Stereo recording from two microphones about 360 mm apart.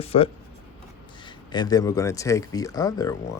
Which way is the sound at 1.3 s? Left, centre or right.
Centre.